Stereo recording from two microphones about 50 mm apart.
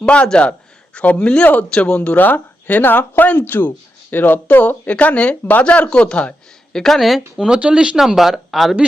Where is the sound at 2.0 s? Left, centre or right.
Left.